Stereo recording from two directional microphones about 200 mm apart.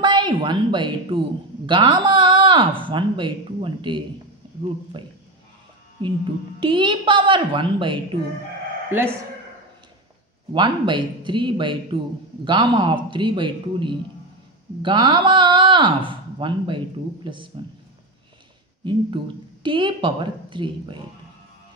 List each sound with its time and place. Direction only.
0.0 s speech: 20° right (ahead or behind)
6.6 s speech: 25° right (ahead or behind)
10.5 s speech: 25° right (ahead or behind)
18.9 s speech: 25° right (ahead or behind)